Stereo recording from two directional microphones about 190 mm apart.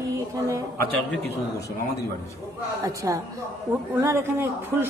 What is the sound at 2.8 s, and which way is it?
A woman's voice, 15° right (ahead or behind).